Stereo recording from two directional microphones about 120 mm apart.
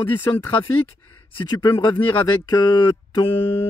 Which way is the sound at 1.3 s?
35° left (ahead or behind).